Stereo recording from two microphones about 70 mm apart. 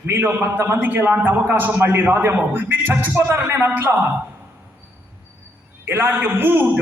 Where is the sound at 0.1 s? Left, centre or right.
Right.